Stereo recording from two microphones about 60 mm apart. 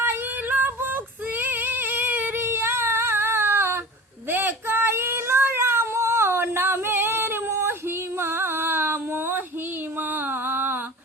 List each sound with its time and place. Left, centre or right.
0.0 s female singing: right
1.4 s a sound: right
4.3 s female singing: right
10.0 s music: right